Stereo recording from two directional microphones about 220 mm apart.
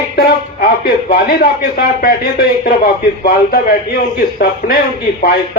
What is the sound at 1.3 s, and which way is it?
Speech, 40° left (ahead or behind).